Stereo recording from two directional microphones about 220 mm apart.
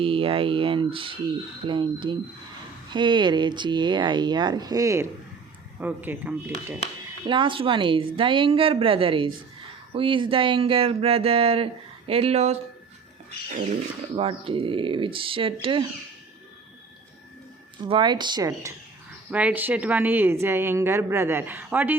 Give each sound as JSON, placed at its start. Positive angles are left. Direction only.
{"t": 0.0, "sound": "a woman's voice", "side_deg": -25}
{"t": 7.3, "sound": "speech", "side_deg": -20}
{"t": 14.2, "sound": "speech", "side_deg": -25}
{"t": 17.8, "sound": "speech", "side_deg": -20}
{"t": 19.3, "sound": "a woman's voice", "side_deg": -5}